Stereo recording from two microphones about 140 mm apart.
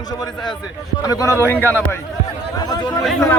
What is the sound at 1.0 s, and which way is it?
Speech, 25° left (ahead or behind).